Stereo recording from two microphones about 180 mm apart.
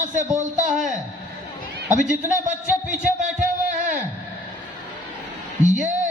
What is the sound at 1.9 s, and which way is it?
Speech, 45° right (ahead or behind).